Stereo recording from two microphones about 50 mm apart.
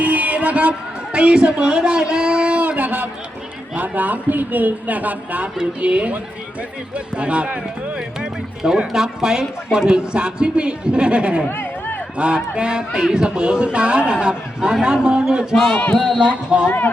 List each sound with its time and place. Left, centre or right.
0.0 s a woman's voice: right
2.6 s a sound: right
3.8 s speech: right
11.4 s a sound: left
12.1 s speech: right
15.7 s speech: left
16.0 s speech: centre
16.6 s speech: left